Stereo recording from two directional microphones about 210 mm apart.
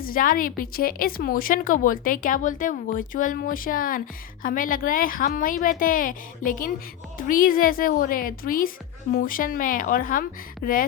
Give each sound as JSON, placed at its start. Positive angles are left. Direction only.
{"t": 0.0, "sound": "a woman's voice", "side_deg": 40}